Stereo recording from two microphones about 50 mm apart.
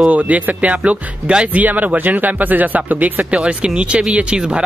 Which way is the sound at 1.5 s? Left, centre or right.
Right.